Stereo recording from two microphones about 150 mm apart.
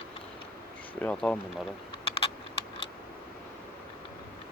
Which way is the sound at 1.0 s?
5° left (ahead or behind).